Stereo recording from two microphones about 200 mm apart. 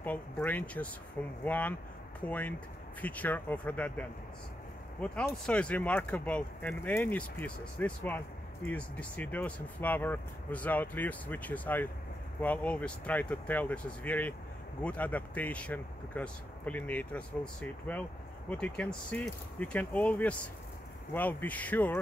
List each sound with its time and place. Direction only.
0.0 s speech: 10° left (ahead or behind)
5.0 s speech: 5° left (ahead or behind)